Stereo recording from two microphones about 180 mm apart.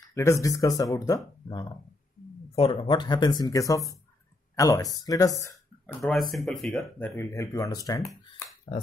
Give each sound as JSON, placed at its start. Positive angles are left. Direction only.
{"t": 0.1, "sound": "speech", "side_deg": 15}
{"t": 6.0, "sound": "speech", "side_deg": 0}
{"t": 7.1, "sound": "speech", "side_deg": 15}